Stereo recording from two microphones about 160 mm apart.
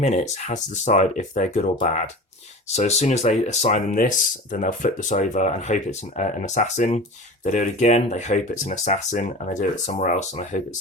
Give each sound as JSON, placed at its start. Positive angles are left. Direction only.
{"t": 0.0, "sound": "speech", "side_deg": 45}